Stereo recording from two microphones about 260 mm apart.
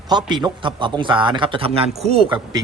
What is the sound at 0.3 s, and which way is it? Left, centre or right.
A man's voice, centre.